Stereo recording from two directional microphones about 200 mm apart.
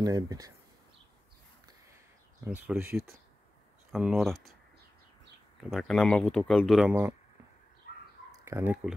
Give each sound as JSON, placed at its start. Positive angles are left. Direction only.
{"t": 0.0, "sound": "speech", "side_deg": -20}
{"t": 2.4, "sound": "speech", "side_deg": -5}
{"t": 5.6, "sound": "speech", "side_deg": 0}
{"t": 8.3, "sound": "speech", "side_deg": -15}